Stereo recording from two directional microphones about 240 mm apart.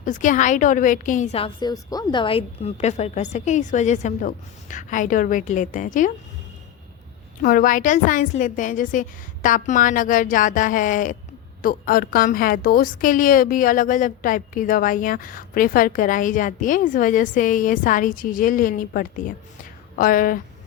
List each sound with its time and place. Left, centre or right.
0.0 s a woman's voice: left
7.4 s a woman's voice: left